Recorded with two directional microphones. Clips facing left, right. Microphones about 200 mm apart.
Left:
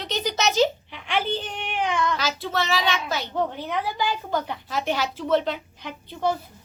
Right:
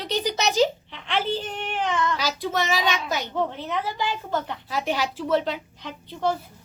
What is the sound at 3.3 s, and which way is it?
A woman's voice, centre (ahead or behind).